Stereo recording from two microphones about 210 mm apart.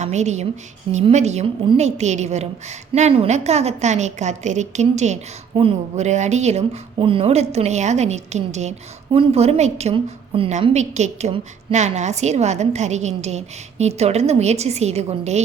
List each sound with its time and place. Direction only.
0.0 s a woman's voice: 35° right (ahead or behind)